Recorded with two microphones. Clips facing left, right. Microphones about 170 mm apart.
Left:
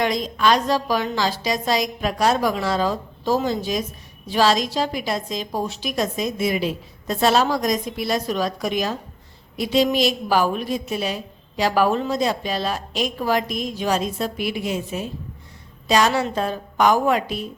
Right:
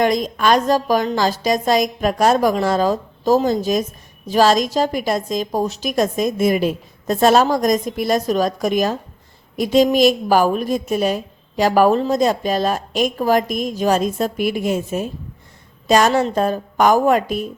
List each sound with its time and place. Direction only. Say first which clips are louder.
0.0 s a woman's voice: right 3 dB; 50° right (ahead or behind)